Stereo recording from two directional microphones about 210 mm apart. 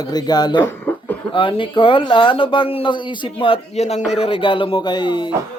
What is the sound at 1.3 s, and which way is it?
Speech, 25° left (ahead or behind).